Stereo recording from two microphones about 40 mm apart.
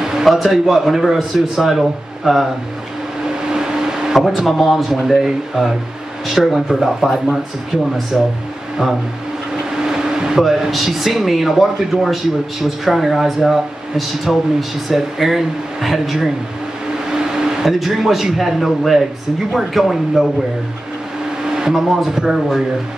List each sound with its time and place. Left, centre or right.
0.0 s speech: centre
3.4 s vehicle: centre
4.1 s speech: centre
8.1 s speech: centre
9.8 s air conditioning: centre
10.7 s speech: centre
17.1 s vehicle: centre
17.6 s speech: centre
21.5 s a sound: centre
21.7 s speech: centre